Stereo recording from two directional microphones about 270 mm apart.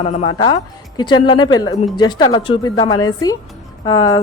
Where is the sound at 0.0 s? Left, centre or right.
Left.